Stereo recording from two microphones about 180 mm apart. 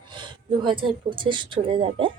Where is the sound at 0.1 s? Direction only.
25° right (ahead or behind).